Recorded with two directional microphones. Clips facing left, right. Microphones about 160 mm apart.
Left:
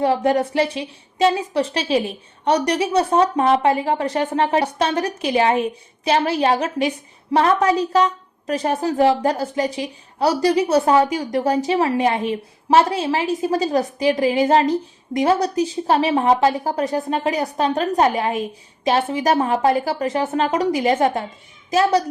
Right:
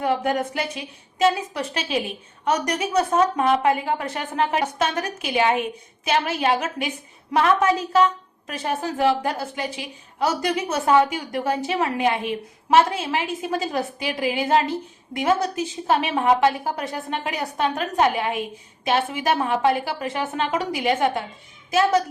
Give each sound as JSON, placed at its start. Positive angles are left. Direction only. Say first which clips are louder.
{"t": 0.0, "sound": "a woman's voice", "louder": "left 5 dB", "side_deg": 35}